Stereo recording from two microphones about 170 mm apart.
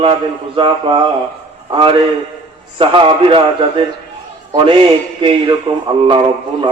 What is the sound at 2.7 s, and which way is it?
A man's voice, 30° right (ahead or behind).